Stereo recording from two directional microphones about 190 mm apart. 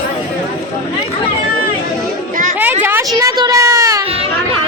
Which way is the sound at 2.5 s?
10° right (ahead or behind).